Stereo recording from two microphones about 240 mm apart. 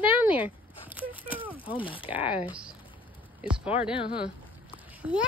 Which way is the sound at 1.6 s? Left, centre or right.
Left.